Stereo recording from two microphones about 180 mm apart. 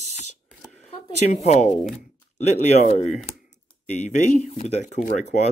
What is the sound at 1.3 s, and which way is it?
Speech, 40° left (ahead or behind).